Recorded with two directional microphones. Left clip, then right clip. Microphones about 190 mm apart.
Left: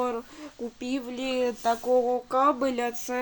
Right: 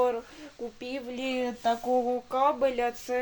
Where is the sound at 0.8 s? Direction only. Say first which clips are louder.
Left 3 dB; 20° left (ahead or behind).